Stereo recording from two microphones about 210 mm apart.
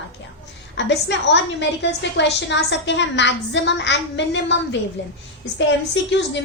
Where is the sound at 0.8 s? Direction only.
55° left (ahead or behind).